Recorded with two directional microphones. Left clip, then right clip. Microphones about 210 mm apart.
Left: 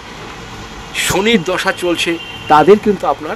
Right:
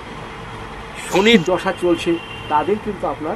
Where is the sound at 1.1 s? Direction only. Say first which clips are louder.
Right 1 dB; centre (ahead or behind).